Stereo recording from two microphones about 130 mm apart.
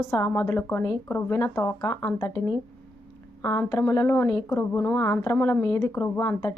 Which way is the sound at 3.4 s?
20° left (ahead or behind).